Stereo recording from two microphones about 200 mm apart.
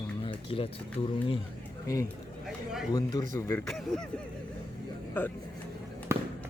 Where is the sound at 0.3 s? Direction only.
25° left (ahead or behind).